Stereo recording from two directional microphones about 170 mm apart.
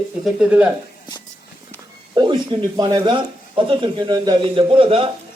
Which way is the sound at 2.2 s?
25° right (ahead or behind).